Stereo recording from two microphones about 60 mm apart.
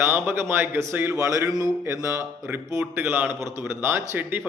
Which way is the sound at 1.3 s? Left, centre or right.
Right.